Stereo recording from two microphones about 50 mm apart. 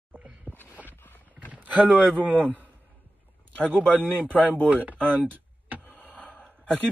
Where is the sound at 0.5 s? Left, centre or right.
Right.